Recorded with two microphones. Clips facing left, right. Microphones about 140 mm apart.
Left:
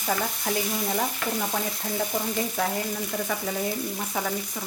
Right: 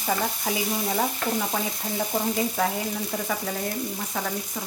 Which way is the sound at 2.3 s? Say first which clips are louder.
Right 2 dB; centre (ahead or behind).